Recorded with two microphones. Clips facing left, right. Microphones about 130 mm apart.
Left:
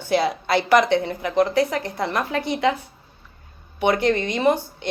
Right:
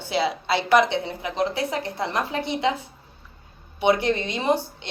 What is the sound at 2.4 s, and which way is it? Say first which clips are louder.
Speech: left 4 dB; 25° right (ahead or behind).